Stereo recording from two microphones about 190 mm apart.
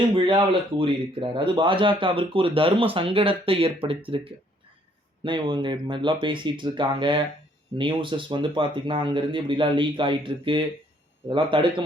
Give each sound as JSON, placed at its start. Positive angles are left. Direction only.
{"t": 0.1, "sound": "speech", "side_deg": -25}